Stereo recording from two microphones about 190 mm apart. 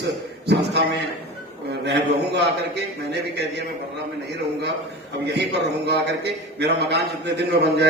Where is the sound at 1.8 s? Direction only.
65° right (ahead or behind).